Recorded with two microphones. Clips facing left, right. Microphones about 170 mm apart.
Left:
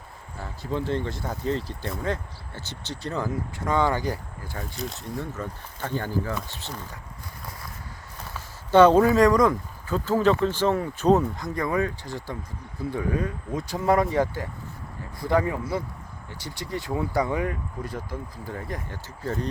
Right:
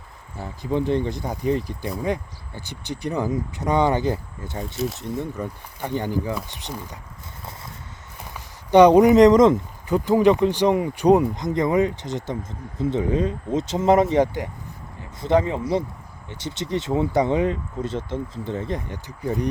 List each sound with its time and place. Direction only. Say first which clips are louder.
0.3 s speech: right 5 dB; 15° right (ahead or behind)
8.2 s speech: even; 15° right (ahead or behind)